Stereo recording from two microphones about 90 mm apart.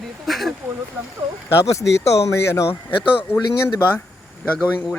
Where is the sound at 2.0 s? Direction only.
30° left (ahead or behind).